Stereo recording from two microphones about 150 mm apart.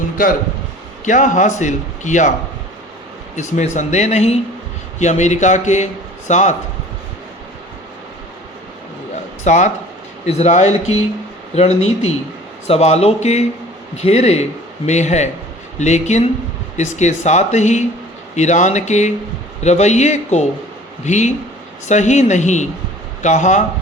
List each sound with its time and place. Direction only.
0.2 s speech: 70° left (ahead or behind)
1.0 s a man's voice: 55° left (ahead or behind)
3.3 s a man's voice: 55° left (ahead or behind)
9.4 s a man's voice: 50° left (ahead or behind)